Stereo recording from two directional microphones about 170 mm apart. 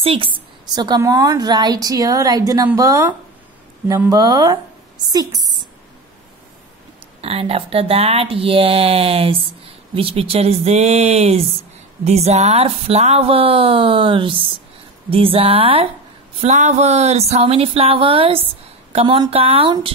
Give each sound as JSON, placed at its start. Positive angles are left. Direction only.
{"t": 0.0, "sound": "a woman's voice", "side_deg": -30}
{"t": 7.2, "sound": "speech", "side_deg": -35}